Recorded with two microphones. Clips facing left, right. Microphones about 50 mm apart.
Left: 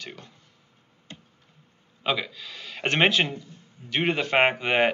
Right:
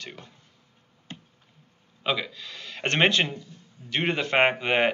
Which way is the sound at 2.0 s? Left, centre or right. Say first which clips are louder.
Left 1 dB; centre.